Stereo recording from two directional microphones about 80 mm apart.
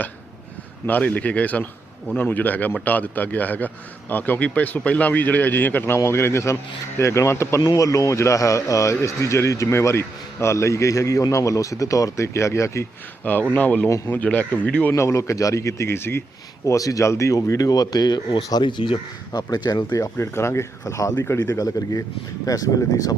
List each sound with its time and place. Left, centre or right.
0.9 s a man's voice: centre; by 7.6 s left
7.6 s a man's voice: left
13.2 s speech: centre
14.9 s a man's voice: left
16.6 s speech: left
20.1 s a man's voice: left